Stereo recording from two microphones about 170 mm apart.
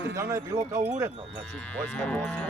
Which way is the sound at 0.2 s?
15° right (ahead or behind).